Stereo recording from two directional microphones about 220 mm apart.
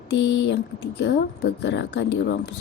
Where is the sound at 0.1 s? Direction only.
55° left (ahead or behind).